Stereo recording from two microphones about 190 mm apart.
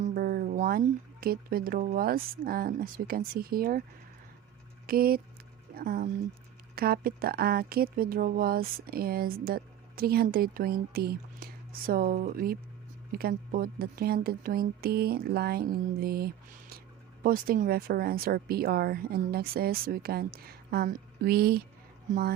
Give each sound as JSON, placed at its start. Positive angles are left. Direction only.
{"t": 0.0, "sound": "speech", "side_deg": -50}
{"t": 4.9, "sound": "speech", "side_deg": -50}
{"t": 22.1, "sound": "speech", "side_deg": -40}